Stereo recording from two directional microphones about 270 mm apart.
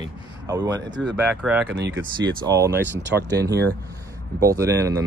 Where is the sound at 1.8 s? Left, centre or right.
Right.